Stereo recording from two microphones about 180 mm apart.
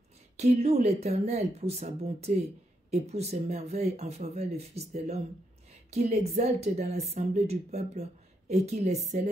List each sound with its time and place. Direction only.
0.4 s speech: 35° right (ahead or behind)